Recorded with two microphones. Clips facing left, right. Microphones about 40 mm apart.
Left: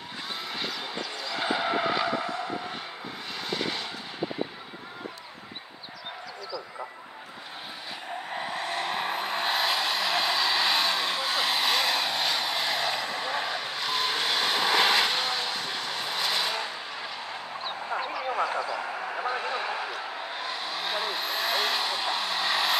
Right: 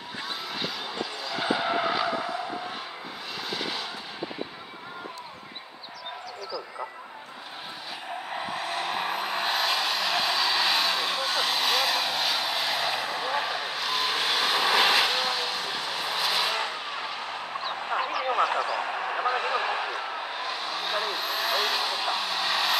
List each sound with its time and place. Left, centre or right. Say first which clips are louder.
0.6 s skidding: right 2 dB; centre
3.4 s vehicle: left 2 dB; centre
8.3 s vehicle: even; centre
16.5 s vehicle: right 3 dB; right
17.7 s a sound: right 3 dB; right
18.2 s vehicle: right 3 dB; right
19.5 s basketball bounce: right 3 dB; right
20.3 s vehicle: right 1 dB; centre